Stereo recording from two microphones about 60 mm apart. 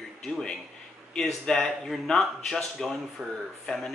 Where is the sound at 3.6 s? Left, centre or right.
Centre.